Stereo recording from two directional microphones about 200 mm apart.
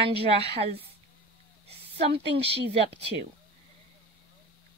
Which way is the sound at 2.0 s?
30° right (ahead or behind).